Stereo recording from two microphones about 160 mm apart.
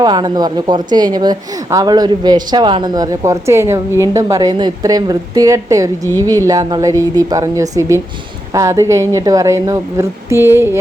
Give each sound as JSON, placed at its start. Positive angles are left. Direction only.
{"t": 0.0, "sound": "a woman's voice", "side_deg": -25}